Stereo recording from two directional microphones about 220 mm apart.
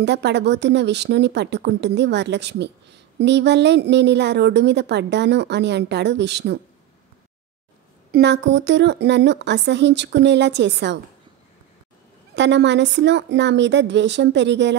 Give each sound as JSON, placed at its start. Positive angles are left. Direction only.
{"t": 0.0, "sound": "a woman's voice", "side_deg": -50}
{"t": 8.1, "sound": "a woman's voice", "side_deg": -50}
{"t": 12.4, "sound": "a woman's voice", "side_deg": -55}